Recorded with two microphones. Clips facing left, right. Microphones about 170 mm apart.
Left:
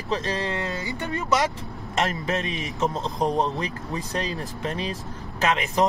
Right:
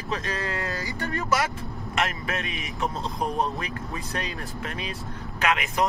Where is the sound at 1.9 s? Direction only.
30° left (ahead or behind).